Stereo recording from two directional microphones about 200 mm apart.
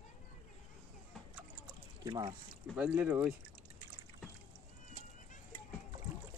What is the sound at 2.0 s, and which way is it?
Speech, 20° right (ahead or behind).